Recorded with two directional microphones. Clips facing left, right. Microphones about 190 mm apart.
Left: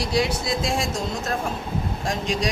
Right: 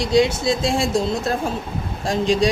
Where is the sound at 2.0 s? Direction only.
30° right (ahead or behind).